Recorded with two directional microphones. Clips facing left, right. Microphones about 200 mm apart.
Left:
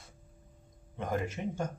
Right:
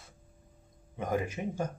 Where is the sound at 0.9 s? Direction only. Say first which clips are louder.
Right 2 dB; 10° right (ahead or behind).